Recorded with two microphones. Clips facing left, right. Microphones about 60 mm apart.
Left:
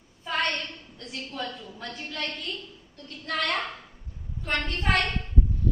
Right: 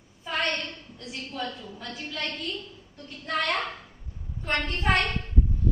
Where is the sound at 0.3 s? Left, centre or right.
Centre.